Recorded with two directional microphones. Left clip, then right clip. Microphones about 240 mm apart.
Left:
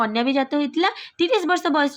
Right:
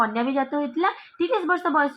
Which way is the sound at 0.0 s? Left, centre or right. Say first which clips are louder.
Left 2 dB; left.